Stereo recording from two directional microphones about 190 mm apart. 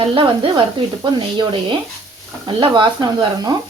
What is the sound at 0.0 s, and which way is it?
Speech, 25° right (ahead or behind).